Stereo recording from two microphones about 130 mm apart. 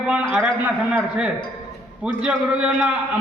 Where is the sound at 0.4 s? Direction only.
10° right (ahead or behind).